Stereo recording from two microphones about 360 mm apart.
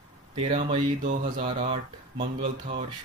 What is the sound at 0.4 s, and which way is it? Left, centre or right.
Speech, centre.